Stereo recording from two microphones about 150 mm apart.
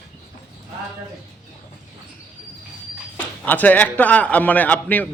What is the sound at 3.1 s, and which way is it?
Speech, 10° left (ahead or behind).